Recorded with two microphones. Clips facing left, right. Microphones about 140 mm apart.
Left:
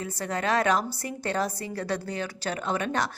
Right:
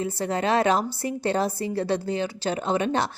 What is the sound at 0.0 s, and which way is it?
A woman's voice, 30° right (ahead or behind).